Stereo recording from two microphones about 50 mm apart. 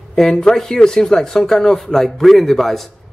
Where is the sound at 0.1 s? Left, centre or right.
Centre.